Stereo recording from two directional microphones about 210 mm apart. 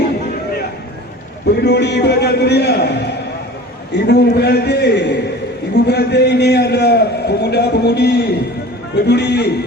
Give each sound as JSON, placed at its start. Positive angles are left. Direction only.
{"t": 1.6, "sound": "a man's voice", "side_deg": 55}